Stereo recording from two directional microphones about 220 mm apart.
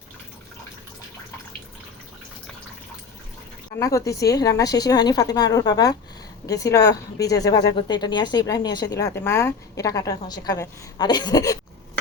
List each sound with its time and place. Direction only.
3.8 s a woman's voice: 15° left (ahead or behind)